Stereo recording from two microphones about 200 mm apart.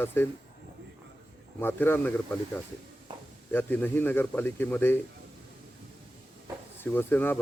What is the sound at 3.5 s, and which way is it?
Speech, 10° left (ahead or behind).